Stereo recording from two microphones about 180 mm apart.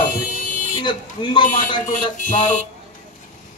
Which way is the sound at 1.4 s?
45° left (ahead or behind).